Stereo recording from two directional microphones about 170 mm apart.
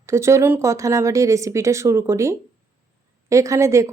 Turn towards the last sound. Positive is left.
turn(degrees=-15)  # may be behind; listen again after turning